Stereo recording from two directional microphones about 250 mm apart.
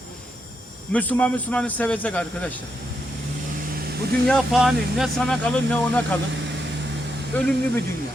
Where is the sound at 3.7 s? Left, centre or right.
Right.